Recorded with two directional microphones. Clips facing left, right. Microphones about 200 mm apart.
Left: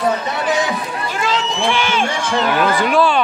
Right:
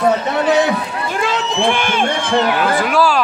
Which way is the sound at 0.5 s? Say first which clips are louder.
Right 4 dB; 60° right (ahead or behind).